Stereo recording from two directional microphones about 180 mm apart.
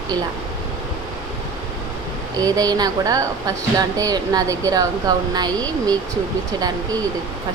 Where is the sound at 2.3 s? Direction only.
20° right (ahead or behind).